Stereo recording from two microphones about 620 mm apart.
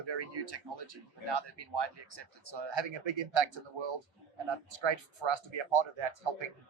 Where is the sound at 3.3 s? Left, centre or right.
Right.